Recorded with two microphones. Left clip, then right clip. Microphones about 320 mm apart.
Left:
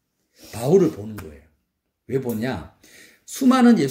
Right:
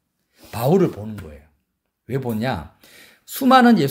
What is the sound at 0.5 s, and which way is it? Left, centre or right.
Speech, right.